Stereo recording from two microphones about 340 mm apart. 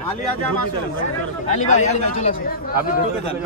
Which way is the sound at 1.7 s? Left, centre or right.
Centre.